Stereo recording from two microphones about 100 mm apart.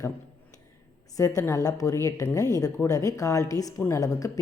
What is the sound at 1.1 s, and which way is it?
A woman's voice, 35° left (ahead or behind).